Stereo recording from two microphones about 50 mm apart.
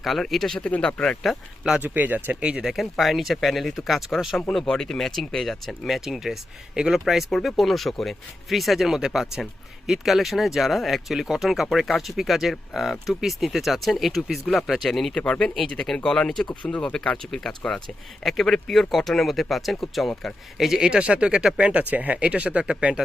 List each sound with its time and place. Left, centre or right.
0.0 s speech: centre
0.7 s speech: left
1.2 s speech: centre
1.8 s speech: right
3.0 s speech: centre
15.1 s speech: left
20.6 s speech: centre
21.6 s speech: right